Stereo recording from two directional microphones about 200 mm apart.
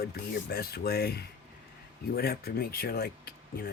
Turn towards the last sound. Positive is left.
turn(degrees=50)  # may be behind; listen again after turning